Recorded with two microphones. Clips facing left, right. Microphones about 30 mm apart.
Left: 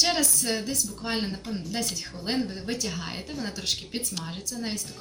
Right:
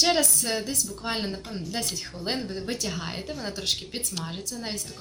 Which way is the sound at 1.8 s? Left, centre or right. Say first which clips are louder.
Even; right.